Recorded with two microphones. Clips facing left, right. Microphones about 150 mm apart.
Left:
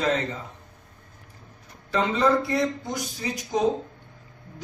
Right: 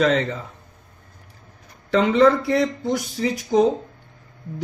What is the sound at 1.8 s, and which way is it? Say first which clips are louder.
Speech: right 6 dB; 70° right (ahead or behind).